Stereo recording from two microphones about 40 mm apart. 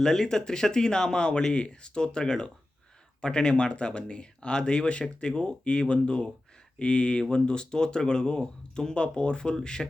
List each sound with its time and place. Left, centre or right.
0.0 s speech: centre